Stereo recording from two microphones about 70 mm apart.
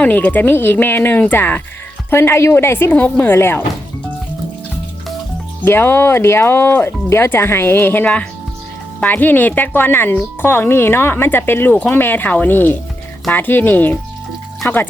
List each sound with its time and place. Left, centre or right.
0.0 s speech: left
2.9 s speech: left
5.6 s speech: left